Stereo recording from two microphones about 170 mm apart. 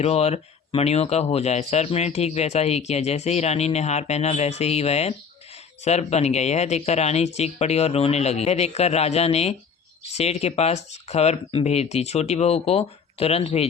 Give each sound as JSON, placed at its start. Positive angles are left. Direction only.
{"t": 0.0, "sound": "speech", "side_deg": 40}